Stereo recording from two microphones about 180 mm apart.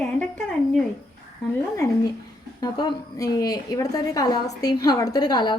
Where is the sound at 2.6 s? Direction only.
25° left (ahead or behind).